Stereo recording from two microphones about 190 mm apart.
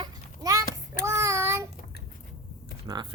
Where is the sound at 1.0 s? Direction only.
15° right (ahead or behind).